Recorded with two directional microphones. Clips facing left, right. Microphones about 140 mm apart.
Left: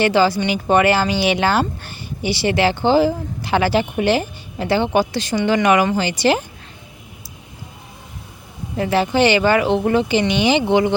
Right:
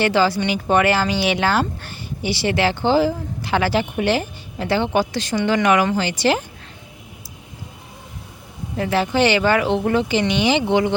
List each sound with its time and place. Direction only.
0.0 s speech: 15° left (ahead or behind)
8.7 s speech: 20° left (ahead or behind)